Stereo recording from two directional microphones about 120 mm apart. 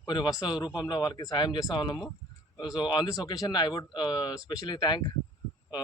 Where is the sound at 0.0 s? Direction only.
35° left (ahead or behind).